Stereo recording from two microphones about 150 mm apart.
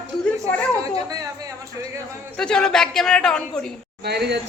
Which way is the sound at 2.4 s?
5° left (ahead or behind).